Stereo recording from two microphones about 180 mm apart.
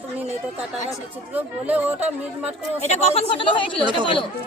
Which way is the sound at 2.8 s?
40° left (ahead or behind).